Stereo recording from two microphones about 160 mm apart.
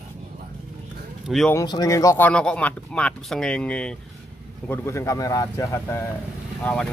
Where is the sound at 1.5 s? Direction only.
25° left (ahead or behind).